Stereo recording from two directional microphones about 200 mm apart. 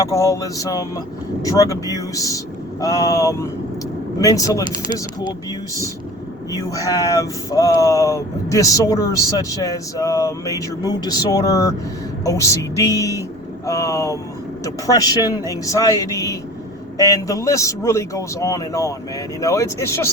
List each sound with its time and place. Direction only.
0.1 s speech: 15° left (ahead or behind)
6.5 s speech: 15° left (ahead or behind)